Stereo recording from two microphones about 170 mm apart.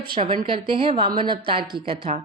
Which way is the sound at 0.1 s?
30° right (ahead or behind).